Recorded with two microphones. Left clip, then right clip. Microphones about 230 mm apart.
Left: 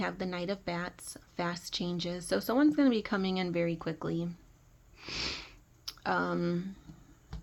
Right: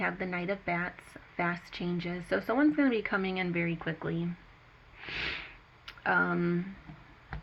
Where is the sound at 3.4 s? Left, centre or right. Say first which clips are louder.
Even; left.